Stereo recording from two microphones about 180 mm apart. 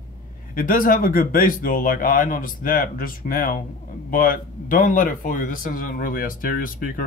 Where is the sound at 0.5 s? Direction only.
50° left (ahead or behind).